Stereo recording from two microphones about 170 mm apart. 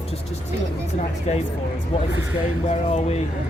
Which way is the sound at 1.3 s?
40° left (ahead or behind).